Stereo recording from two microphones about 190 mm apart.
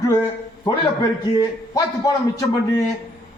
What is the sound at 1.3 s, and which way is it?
A man's voice, 20° left (ahead or behind).